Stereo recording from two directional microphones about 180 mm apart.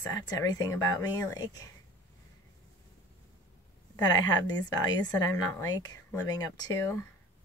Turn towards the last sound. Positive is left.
turn(degrees=20)  # may be behind; listen again after turning